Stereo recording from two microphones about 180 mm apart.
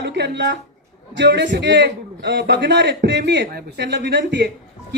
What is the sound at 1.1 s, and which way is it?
A woman's voice, 75° right (ahead or behind).